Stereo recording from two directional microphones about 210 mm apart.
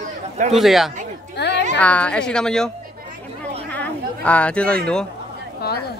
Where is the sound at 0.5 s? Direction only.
Centre (ahead or behind).